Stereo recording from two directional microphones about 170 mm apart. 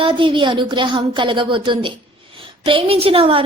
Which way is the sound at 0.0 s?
30° right (ahead or behind).